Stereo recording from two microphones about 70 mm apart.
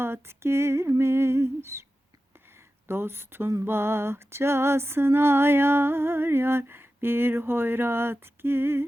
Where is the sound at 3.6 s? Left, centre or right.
Right.